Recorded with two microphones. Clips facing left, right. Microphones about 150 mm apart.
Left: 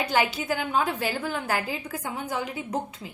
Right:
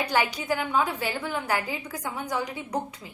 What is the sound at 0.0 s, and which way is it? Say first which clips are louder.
A woman's voice: left 1 dB; 25° left (ahead or behind).